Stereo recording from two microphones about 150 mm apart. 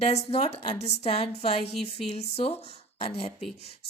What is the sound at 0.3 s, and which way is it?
A woman's voice, 45° left (ahead or behind).